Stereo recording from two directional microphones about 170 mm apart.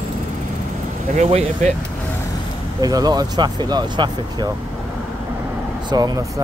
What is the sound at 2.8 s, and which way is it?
Speech, 20° right (ahead or behind).